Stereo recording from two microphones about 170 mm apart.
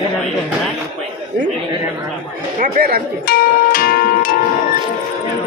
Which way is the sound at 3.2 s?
60° left (ahead or behind).